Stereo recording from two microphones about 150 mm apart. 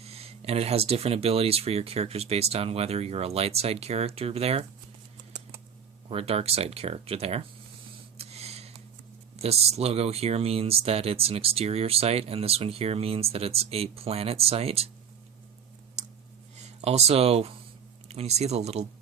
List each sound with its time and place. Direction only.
0.0 s speech: 40° right (ahead or behind)
6.1 s speech: 40° right (ahead or behind)
8.2 s a sound: 45° right (ahead or behind)
9.4 s speech: 45° right (ahead or behind)
16.6 s speech: 45° right (ahead or behind)